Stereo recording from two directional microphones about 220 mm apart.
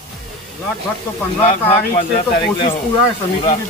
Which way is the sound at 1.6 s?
25° left (ahead or behind).